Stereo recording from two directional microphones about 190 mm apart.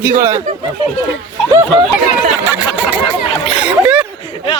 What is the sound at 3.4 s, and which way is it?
Splash, 5° right (ahead or behind).